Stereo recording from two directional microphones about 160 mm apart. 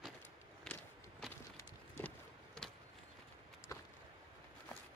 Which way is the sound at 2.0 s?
5° left (ahead or behind).